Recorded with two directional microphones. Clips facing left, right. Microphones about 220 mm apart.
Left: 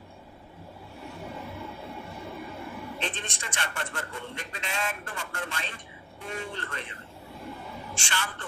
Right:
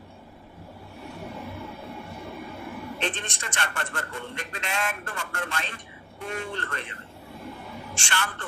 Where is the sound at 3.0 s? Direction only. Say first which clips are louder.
Right 6 dB; 70° right (ahead or behind).